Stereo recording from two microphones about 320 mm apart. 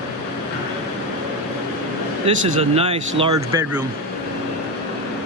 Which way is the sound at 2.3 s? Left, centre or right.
Centre.